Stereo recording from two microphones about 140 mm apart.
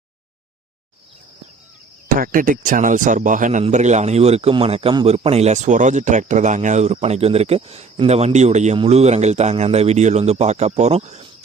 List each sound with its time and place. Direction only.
2.1 s speech: 85° right; by 3.6 s 65° right (ahead or behind)
3.6 s speech: 55° right (ahead or behind)